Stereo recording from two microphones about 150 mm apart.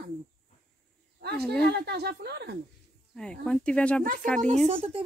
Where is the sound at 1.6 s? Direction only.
90° right.